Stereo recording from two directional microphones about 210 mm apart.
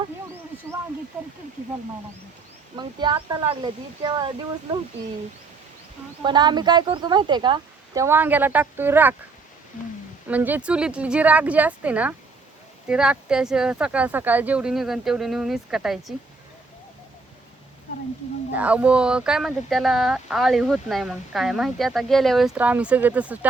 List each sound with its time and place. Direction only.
2.7 s a woman's voice: 20° right (ahead or behind)
6.2 s a woman's voice: 20° right (ahead or behind)
10.2 s speech: 10° right (ahead or behind)
18.5 s speech: 5° right (ahead or behind)